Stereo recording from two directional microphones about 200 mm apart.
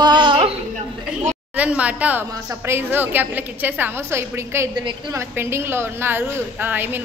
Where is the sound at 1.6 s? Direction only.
5° right (ahead or behind).